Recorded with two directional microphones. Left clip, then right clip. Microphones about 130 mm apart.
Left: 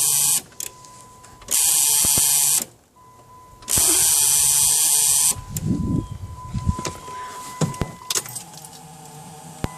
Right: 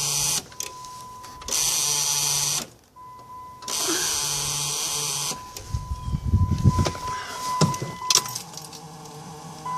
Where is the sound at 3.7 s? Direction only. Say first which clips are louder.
Left 4 dB; 15° left (ahead or behind).